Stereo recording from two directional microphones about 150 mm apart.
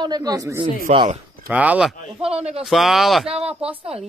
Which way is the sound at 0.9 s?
35° right (ahead or behind).